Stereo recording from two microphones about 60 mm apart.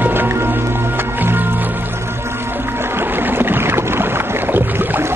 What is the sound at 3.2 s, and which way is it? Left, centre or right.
Boat, right.